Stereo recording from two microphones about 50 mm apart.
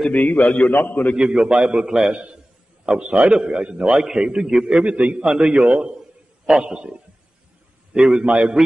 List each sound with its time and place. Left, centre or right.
0.1 s a man's voice: left
1.1 s a man's voice: centre